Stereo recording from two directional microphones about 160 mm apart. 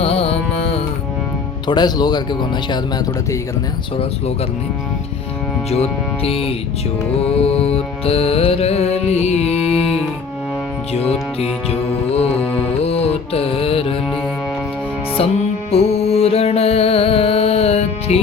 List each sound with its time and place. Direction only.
0.0 s carnatic music: 40° left (ahead or behind)
1.6 s speech: 25° left (ahead or behind)
5.7 s music: 40° left (ahead or behind)
10.9 s music: 40° left (ahead or behind)
12.8 s mantra: 40° left (ahead or behind)
15.1 s music: 40° left (ahead or behind)